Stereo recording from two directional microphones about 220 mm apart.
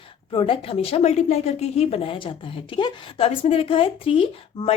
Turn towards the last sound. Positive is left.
turn(degrees=25)  # may be behind; listen again after turning